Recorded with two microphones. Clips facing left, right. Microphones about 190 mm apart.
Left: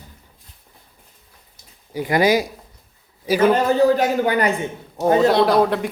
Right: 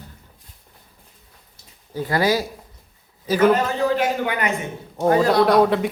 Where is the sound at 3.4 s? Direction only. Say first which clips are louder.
Left 2 dB; 35° left (ahead or behind).